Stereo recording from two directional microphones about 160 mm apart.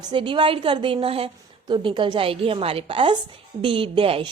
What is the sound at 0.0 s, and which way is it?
Speech, 30° right (ahead or behind).